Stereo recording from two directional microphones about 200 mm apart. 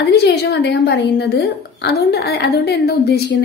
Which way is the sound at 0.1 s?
55° left (ahead or behind).